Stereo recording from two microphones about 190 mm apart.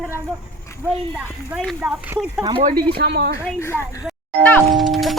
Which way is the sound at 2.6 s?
55° right (ahead or behind).